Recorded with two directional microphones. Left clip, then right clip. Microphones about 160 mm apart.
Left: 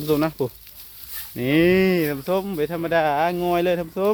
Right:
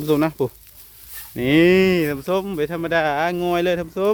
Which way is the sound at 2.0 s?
25° right (ahead or behind).